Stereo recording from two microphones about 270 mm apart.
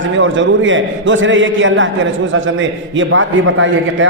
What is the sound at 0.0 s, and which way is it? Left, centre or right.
A man's voice, right.